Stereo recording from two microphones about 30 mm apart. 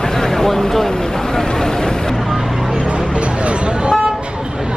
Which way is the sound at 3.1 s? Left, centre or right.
Right.